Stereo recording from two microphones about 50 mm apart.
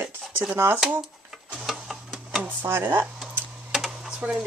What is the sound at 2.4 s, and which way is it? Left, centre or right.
Speech, right.